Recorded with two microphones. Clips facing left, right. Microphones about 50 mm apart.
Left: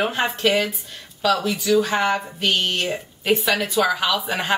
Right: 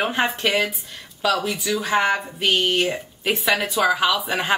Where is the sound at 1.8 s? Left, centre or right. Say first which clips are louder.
Even; centre.